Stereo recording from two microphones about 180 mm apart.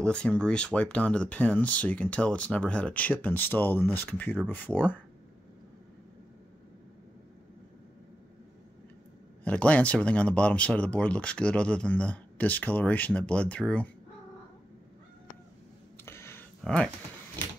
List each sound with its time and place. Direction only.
0.0 s speech: 5° left (ahead or behind)
9.4 s speech: 5° left (ahead or behind)
16.1 s a sound: 15° left (ahead or behind)
16.6 s speech: 5° left (ahead or behind)